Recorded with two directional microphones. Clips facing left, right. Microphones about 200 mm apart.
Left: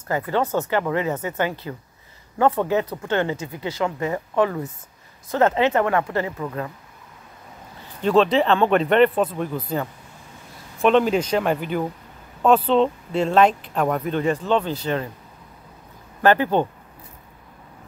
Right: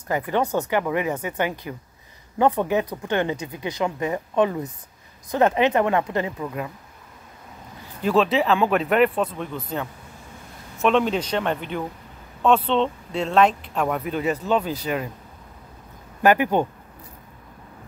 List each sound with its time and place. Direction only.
0.1 s speech: 15° right (ahead or behind)
8.0 s speech: 5° right (ahead or behind)
10.8 s speech: centre (ahead or behind)
16.2 s speech: 15° right (ahead or behind)